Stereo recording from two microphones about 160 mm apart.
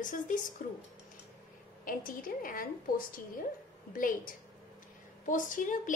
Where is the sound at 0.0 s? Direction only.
55° left (ahead or behind).